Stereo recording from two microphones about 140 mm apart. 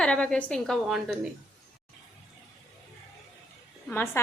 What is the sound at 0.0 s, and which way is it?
A woman's voice, 10° left (ahead or behind).